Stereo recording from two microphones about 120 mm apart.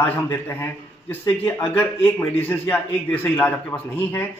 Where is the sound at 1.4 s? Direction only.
15° left (ahead or behind).